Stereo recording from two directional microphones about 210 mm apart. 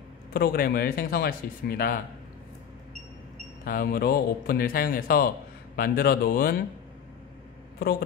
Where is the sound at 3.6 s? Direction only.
45° left (ahead or behind).